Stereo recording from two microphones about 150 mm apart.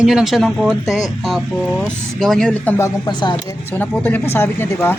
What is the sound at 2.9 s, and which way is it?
Speech, 30° left (ahead or behind).